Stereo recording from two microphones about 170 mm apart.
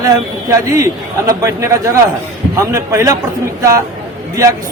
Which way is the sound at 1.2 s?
20° right (ahead or behind).